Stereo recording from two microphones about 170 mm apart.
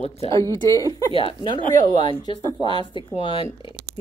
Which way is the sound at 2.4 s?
25° right (ahead or behind).